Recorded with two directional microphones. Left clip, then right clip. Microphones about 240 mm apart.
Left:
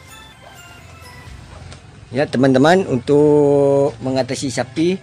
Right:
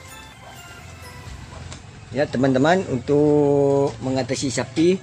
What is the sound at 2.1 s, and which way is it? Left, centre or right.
Speech, left.